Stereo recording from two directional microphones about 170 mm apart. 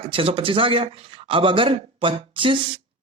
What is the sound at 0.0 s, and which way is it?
Speech, 30° right (ahead or behind).